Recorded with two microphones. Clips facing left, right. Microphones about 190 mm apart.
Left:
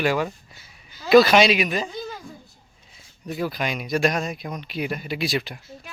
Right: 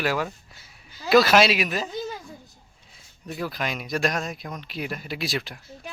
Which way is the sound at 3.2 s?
Centre (ahead or behind).